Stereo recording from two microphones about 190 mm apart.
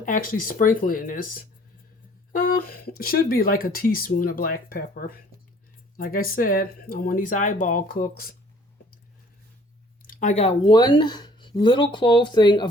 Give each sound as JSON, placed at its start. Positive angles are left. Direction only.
{"t": 0.0, "sound": "speech", "side_deg": 45}
{"t": 10.1, "sound": "speech", "side_deg": 40}